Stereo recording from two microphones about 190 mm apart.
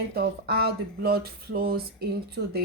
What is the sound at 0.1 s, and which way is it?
A woman's voice, 55° right (ahead or behind).